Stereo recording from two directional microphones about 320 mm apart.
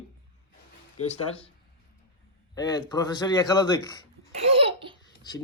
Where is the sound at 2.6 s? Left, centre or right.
Centre.